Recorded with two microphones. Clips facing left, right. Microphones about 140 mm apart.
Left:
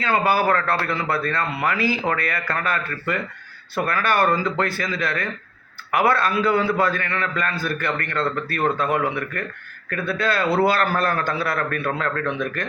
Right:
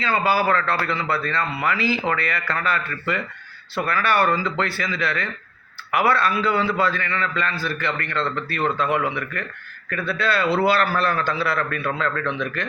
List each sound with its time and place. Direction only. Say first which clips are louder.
0.3 s a man's voice: right 1 dB; 50° left (ahead or behind)